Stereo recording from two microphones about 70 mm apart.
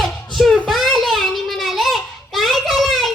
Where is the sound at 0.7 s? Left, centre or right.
Centre.